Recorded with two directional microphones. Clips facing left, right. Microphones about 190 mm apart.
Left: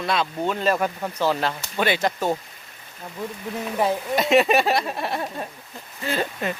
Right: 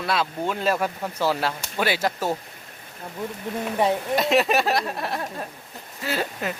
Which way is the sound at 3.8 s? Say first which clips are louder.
Even; centre (ahead or behind).